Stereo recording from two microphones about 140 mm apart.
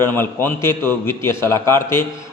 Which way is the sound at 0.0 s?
15° left (ahead or behind).